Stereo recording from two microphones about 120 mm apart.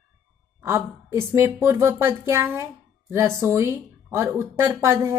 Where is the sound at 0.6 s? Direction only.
20° right (ahead or behind).